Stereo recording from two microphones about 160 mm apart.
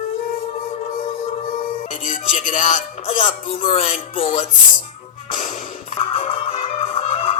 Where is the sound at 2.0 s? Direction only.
55° left (ahead or behind).